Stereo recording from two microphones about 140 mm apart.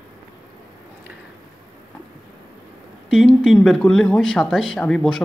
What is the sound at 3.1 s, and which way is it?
Speech, centre (ahead or behind).